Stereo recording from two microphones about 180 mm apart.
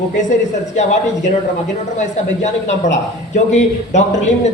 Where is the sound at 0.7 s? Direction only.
40° left (ahead or behind).